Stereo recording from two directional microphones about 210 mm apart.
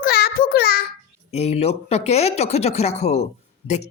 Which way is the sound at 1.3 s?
30° left (ahead or behind).